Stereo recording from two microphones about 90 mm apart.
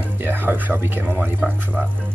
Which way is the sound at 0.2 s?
25° right (ahead or behind).